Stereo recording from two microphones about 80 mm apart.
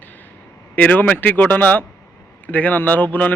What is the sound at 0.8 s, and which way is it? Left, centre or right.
A man's voice, left.